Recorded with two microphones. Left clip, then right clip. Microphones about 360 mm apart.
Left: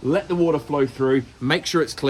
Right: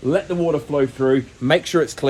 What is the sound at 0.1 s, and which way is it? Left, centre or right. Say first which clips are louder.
Speech: right 1 dB; centre.